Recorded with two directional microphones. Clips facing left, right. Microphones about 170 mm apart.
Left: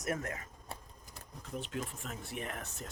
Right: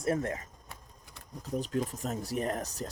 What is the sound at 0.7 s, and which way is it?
Sewing machine, 30° left (ahead or behind).